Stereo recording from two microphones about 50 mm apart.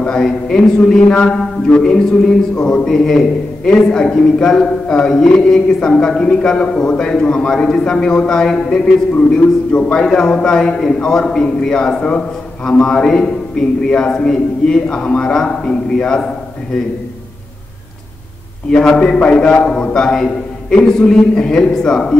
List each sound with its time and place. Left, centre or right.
0.0 s a man's voice: centre
1.0 s a man's voice: left
9.7 s speech: left
10.0 s a man's voice: centre
18.7 s a man's voice: centre